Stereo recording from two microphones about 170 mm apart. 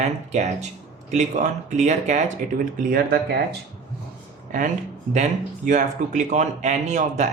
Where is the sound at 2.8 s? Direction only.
65° right (ahead or behind).